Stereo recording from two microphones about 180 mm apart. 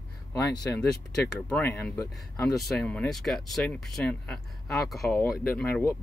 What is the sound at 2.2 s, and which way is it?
Speech, centre (ahead or behind).